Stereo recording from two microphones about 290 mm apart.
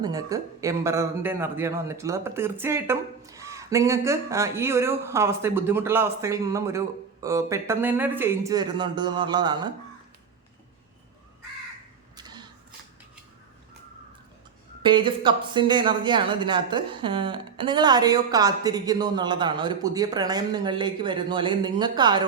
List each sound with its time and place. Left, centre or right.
0.0 s speech: centre
12.1 s a sound: centre
14.8 s speech: centre